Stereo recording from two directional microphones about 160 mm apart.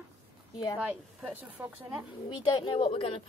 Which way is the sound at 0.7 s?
10° right (ahead or behind).